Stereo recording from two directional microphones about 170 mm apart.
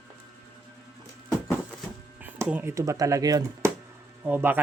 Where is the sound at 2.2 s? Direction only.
10° right (ahead or behind).